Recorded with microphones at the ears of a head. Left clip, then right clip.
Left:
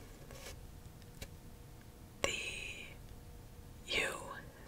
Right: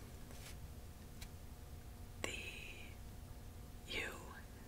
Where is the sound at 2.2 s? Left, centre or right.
Left.